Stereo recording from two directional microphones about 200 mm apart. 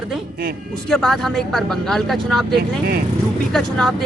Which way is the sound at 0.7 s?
Centre (ahead or behind).